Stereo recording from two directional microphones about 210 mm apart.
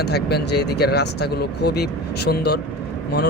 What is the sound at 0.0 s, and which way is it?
Speech, 50° left (ahead or behind).